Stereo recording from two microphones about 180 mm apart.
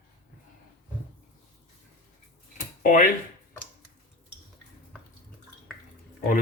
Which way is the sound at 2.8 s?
50° left (ahead or behind).